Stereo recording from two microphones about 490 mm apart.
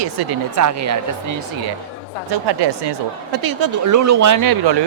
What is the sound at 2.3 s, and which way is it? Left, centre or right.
Speech, right.